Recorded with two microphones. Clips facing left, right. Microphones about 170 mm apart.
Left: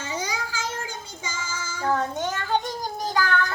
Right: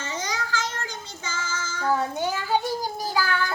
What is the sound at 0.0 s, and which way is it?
Child singing, 10° left (ahead or behind).